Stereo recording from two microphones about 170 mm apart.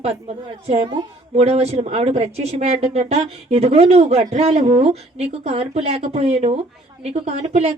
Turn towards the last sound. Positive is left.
turn(degrees=-40)  # may be behind; listen again after turning